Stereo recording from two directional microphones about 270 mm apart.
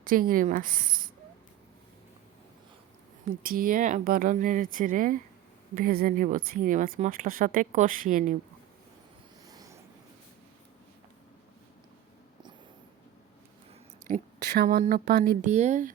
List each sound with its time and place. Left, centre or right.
0.0 s speech: right
3.4 s speech: right
9.5 s a sound: centre
14.1 s speech: right